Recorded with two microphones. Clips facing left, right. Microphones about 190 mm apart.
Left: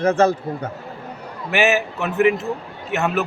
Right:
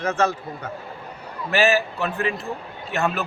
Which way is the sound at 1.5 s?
20° left (ahead or behind).